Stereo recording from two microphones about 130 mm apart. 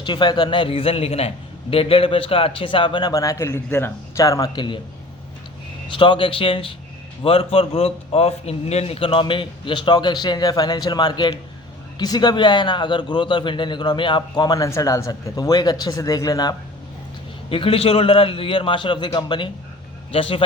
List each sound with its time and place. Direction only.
0.0 s a man's voice: 35° left (ahead or behind)
5.9 s a man's voice: 40° left (ahead or behind)
17.5 s a man's voice: 45° left (ahead or behind)